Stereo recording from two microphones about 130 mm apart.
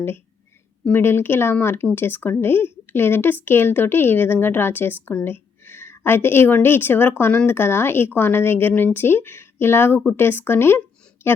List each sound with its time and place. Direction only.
0.9 s a woman's voice: 15° left (ahead or behind)